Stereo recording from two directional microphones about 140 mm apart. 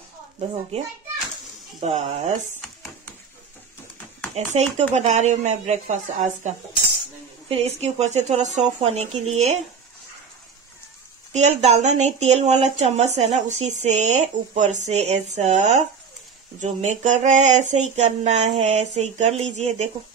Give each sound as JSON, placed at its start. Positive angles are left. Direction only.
{"t": 0.4, "sound": "speech", "side_deg": -45}
{"t": 4.5, "sound": "speech", "side_deg": -50}
{"t": 4.9, "sound": "a sound", "side_deg": -55}
{"t": 7.4, "sound": "speech", "side_deg": -45}
{"t": 11.3, "sound": "speech", "side_deg": -55}
{"t": 16.5, "sound": "a sound", "side_deg": -55}
{"t": 18.9, "sound": "speech", "side_deg": -55}